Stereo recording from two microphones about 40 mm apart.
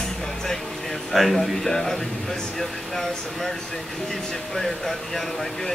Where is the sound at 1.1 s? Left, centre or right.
Centre.